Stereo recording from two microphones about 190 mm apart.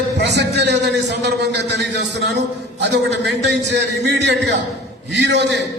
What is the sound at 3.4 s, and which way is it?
A man's voice, 65° right (ahead or behind).